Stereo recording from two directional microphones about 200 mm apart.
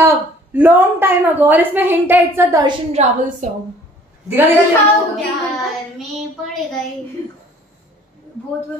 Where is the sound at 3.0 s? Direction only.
35° right (ahead or behind).